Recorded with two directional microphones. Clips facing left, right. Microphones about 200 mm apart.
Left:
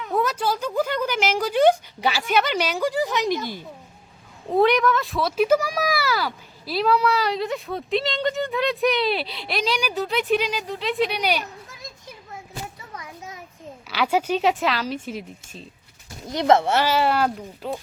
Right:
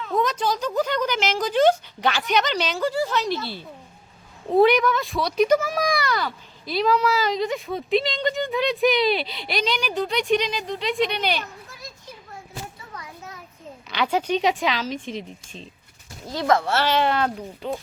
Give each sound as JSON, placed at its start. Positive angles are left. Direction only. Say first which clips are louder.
{"t": 0.0, "sound": "speech", "louder": "even", "side_deg": 10}
{"t": 4.4, "sound": "speech", "louder": "right 1 dB", "side_deg": 0}
{"t": 13.9, "sound": "speech", "louder": "left 1 dB", "side_deg": 5}
{"t": 16.3, "sound": "speech", "louder": "left 3 dB", "side_deg": 20}
{"t": 16.8, "sound": "speech", "louder": "left 1 dB", "side_deg": 5}